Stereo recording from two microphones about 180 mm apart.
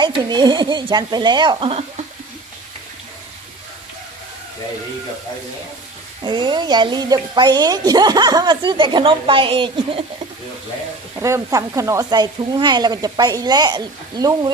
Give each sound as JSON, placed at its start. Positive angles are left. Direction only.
{"t": 0.0, "sound": "speech", "side_deg": -25}
{"t": 6.2, "sound": "speech", "side_deg": -25}
{"t": 11.2, "sound": "speech", "side_deg": -15}